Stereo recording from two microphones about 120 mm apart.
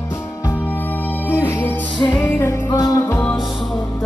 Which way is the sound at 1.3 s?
20° left (ahead or behind).